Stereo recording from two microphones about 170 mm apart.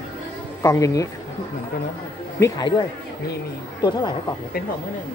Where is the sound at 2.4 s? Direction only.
20° left (ahead or behind).